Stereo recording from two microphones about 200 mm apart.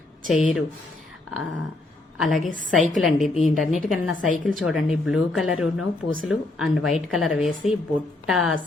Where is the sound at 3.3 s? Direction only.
35° left (ahead or behind).